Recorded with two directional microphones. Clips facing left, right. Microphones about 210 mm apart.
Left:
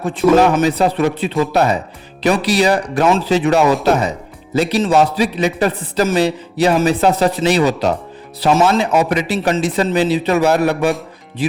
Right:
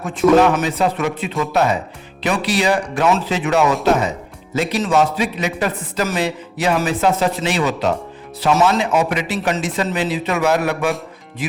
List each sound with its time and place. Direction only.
0.4 s a man's voice: 35° left (ahead or behind)